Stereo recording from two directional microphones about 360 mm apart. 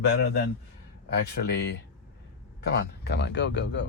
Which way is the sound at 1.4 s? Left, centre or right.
Left.